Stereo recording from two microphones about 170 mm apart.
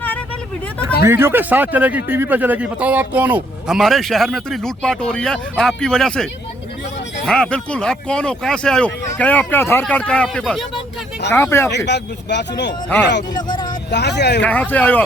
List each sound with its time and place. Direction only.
1.0 s a man's voice: 15° right (ahead or behind); by 6.2 s 5° left (ahead or behind)
7.3 s speech: 5° left (ahead or behind)
11.9 s speech: 90° left
13.3 s vehicle: 25° left (ahead or behind)
13.9 s speech: 85° left
14.4 s speech: 10° left (ahead or behind)